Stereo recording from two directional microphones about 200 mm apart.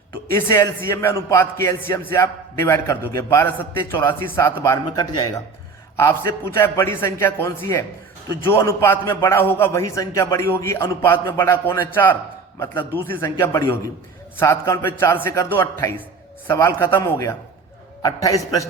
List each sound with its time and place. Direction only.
0.3 s a man's voice: 15° left (ahead or behind)